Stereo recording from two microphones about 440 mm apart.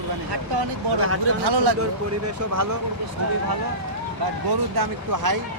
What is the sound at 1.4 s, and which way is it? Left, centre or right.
Speech, right.